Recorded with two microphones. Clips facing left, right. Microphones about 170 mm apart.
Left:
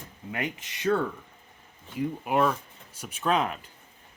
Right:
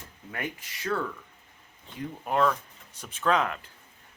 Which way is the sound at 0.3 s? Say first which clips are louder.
Left 3 dB; 20° left (ahead or behind).